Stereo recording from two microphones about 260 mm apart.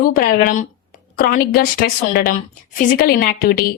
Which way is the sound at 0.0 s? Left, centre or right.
Left.